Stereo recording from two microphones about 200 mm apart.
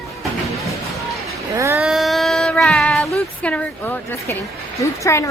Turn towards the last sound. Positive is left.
turn(degrees=15)  # may be behind; listen again after turning